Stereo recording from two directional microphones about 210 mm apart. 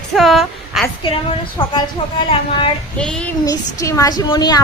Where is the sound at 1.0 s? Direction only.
20° left (ahead or behind).